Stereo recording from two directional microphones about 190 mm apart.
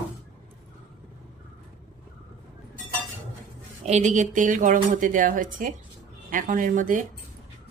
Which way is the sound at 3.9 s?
35° right (ahead or behind).